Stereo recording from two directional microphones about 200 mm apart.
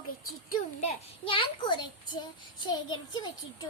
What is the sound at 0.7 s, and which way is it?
A child's voice, 30° left (ahead or behind).